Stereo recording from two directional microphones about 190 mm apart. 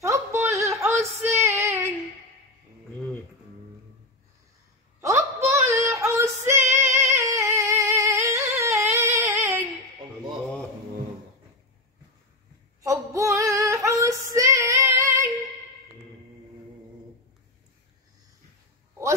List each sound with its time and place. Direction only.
0.0 s a sound: 15° right (ahead or behind)
1.4 s female singing: 10° right (ahead or behind)
5.0 s female singing: 15° right (ahead or behind)
12.8 s female singing: 15° right (ahead or behind)